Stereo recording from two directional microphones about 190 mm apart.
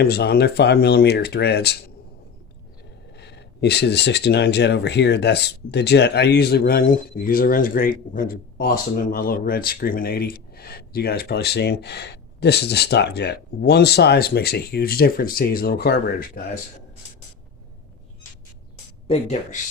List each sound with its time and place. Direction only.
0.0 s speech: 55° left (ahead or behind)
3.1 s speech: 65° left (ahead or behind)
19.0 s speech: 35° left (ahead or behind)